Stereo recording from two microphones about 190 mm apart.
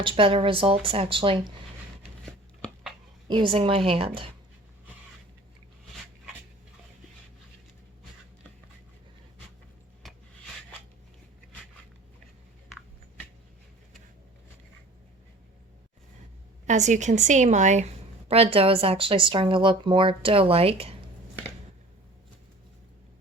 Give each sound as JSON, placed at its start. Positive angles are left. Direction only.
{"t": 0.0, "sound": "a woman's voice", "side_deg": -25}
{"t": 2.2, "sound": "chopping", "side_deg": 5}
{"t": 3.2, "sound": "a woman's voice", "side_deg": -25}
{"t": 16.6, "sound": "a woman's voice", "side_deg": -40}